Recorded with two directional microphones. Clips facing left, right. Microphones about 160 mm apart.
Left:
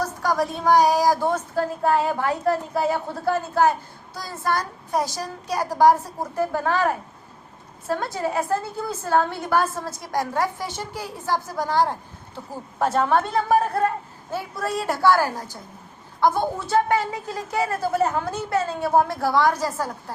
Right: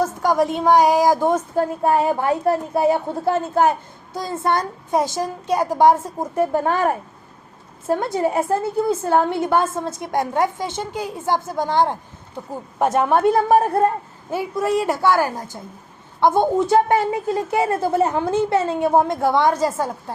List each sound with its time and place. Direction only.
0.0 s a woman's voice: 20° right (ahead or behind)
14.3 s a woman's voice: 15° right (ahead or behind)